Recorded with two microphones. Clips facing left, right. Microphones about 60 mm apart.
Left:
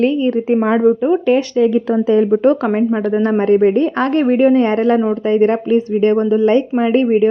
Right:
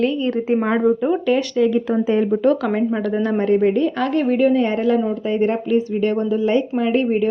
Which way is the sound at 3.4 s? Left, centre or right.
Left.